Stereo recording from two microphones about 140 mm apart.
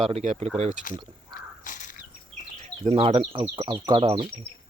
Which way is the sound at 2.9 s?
45° right (ahead or behind).